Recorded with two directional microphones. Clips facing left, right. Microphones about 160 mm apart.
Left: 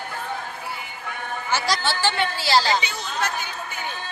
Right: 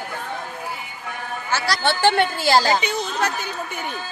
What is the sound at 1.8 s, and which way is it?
A woman's voice, 55° right (ahead or behind).